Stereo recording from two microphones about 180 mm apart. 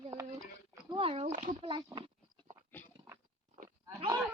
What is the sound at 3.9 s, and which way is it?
Goat, 25° right (ahead or behind).